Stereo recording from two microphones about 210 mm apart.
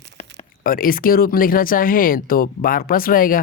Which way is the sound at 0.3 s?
40° left (ahead or behind).